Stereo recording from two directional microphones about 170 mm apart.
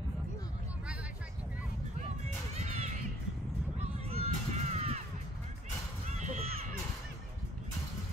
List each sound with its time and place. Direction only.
2.5 s music: 40° right (ahead or behind)
4.2 s crow: 40° right (ahead or behind)
6.0 s a sound: 40° right (ahead or behind)